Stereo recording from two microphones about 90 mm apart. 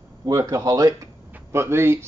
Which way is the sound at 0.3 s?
35° right (ahead or behind).